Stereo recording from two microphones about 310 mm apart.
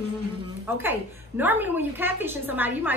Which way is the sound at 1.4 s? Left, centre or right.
Centre.